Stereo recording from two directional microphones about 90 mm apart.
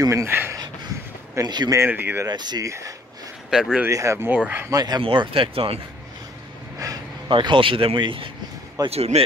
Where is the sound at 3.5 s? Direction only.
5° right (ahead or behind).